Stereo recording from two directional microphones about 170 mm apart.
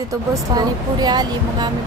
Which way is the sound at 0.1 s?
25° right (ahead or behind).